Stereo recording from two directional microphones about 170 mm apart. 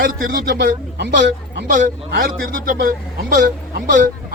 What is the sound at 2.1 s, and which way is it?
A man's voice, 60° right (ahead or behind).